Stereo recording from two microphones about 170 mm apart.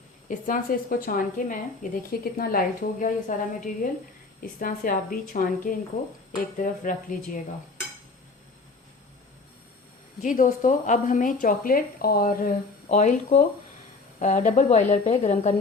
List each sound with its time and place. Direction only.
0.3 s a woman's voice: 55° left (ahead or behind)
10.2 s a woman's voice: 50° left (ahead or behind)
12.9 s a woman's voice: 45° left (ahead or behind)